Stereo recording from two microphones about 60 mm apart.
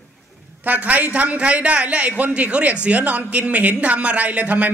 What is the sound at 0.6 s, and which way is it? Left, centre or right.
Speech, right.